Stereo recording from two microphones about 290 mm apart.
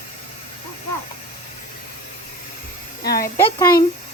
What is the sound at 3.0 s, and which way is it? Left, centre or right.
Speech, left.